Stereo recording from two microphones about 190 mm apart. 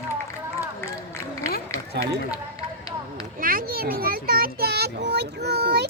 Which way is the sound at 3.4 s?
50° right (ahead or behind).